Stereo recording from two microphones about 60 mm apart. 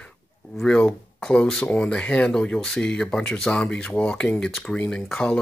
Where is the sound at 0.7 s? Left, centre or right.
Centre.